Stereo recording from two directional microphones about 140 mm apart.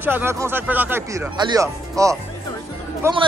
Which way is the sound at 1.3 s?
30° right (ahead or behind).